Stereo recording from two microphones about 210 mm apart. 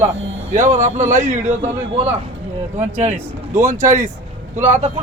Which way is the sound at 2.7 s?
35° right (ahead or behind).